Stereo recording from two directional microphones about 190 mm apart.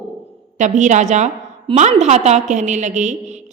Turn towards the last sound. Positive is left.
turn(degrees=-40)  # may be behind; listen again after turning